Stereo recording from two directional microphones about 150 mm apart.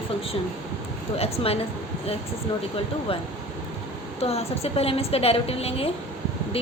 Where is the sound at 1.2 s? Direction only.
40° left (ahead or behind).